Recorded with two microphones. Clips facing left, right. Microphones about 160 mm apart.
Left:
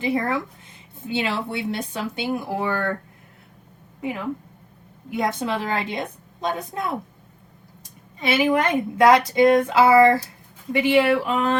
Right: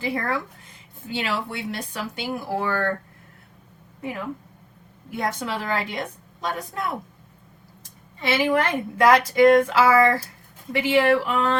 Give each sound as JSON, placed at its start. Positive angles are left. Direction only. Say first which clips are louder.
{"t": 0.0, "sound": "speech", "louder": "left 3 dB", "side_deg": 20}
{"t": 4.0, "sound": "speech", "louder": "left 3 dB", "side_deg": 15}
{"t": 8.3, "sound": "speech", "louder": "left 2 dB", "side_deg": 20}